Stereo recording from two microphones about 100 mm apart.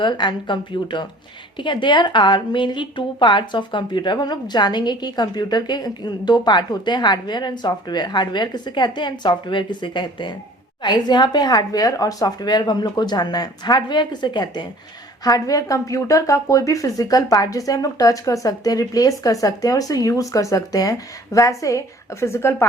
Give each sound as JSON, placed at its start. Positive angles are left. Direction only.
{"t": 0.0, "sound": "a woman's voice", "side_deg": 50}